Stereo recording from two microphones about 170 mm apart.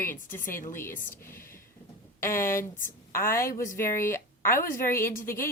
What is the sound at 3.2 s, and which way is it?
Speech, 60° left (ahead or behind).